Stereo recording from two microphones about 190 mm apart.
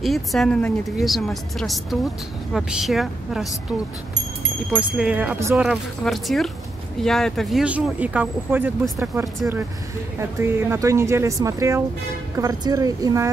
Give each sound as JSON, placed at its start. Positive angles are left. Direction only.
{"t": 0.0, "sound": "speech", "side_deg": 0}
{"t": 4.7, "sound": "speech", "side_deg": -5}